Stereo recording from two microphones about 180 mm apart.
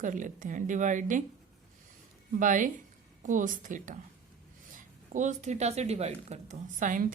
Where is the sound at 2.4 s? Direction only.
45° right (ahead or behind).